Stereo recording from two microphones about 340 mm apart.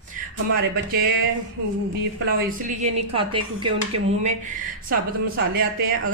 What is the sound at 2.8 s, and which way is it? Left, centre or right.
Speech, centre.